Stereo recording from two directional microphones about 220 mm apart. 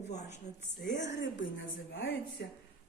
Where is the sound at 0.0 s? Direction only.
30° left (ahead or behind).